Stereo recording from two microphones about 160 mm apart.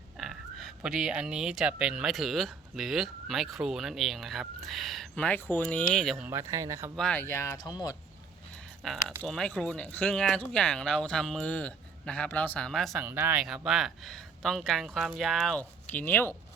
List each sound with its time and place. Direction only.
0.2 s speech: centre (ahead or behind)
6.2 s speech: 15° right (ahead or behind)
6.9 s speech: 5° left (ahead or behind); by 7.9 s 25° left (ahead or behind)
8.8 s speech: centre (ahead or behind)
13.0 s speech: 15° right (ahead or behind)
13.4 s speech: centre (ahead or behind)